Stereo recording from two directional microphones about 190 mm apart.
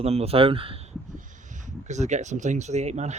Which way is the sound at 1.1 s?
40° right (ahead or behind).